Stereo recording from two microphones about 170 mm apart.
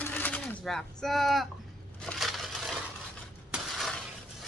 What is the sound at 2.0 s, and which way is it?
Crushing, centre (ahead or behind).